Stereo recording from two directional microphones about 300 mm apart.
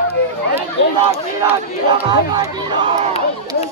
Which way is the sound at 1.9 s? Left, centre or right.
Centre.